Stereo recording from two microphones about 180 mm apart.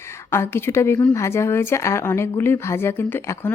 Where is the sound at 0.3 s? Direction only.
15° left (ahead or behind).